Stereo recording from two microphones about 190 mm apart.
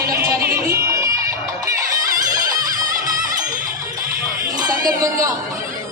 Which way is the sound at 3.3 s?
45° right (ahead or behind).